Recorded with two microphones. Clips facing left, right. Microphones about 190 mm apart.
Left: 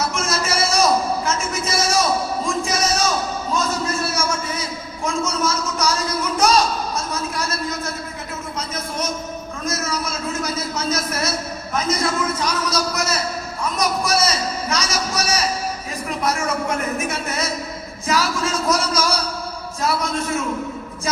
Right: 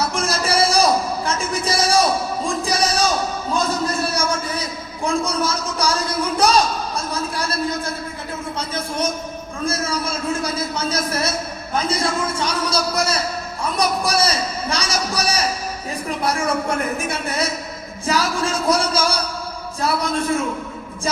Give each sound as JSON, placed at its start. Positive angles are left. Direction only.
{"t": 0.0, "sound": "a sound", "side_deg": -35}
{"t": 5.0, "sound": "a man's voice", "side_deg": -35}
{"t": 10.4, "sound": "a man's voice", "side_deg": -30}